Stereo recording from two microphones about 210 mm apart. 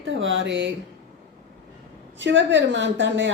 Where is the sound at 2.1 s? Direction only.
60° right (ahead or behind).